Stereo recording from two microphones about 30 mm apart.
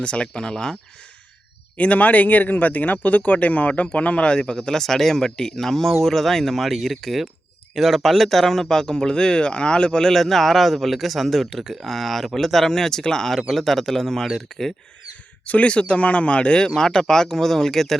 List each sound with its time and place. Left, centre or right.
0.0 s speech: left
1.7 s a man's voice: left
4.2 s a man's voice: left
10.1 s a man's voice: centre
13.5 s a man's voice: centre
15.4 s a man's voice: left; by 17.9 s centre